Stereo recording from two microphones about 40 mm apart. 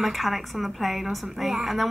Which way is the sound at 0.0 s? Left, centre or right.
Centre.